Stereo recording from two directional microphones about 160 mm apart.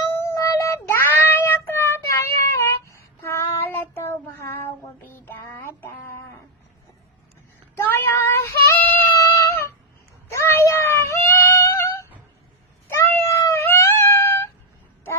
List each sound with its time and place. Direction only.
0.2 s child singing: 15° left (ahead or behind)
7.8 s child singing: 15° left (ahead or behind)
13.0 s cat: 15° left (ahead or behind)